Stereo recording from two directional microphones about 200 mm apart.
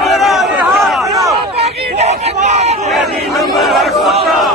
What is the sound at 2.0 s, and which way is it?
Crowd, 30° right (ahead or behind).